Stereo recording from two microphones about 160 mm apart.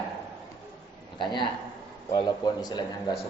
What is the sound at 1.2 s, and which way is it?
A man's voice, 30° left (ahead or behind).